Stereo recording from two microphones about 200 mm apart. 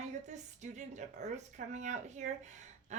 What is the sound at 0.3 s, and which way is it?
Speech, 35° right (ahead or behind).